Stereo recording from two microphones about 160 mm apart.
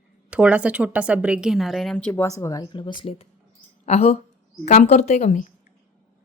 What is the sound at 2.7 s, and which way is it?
A woman's voice, 30° left (ahead or behind).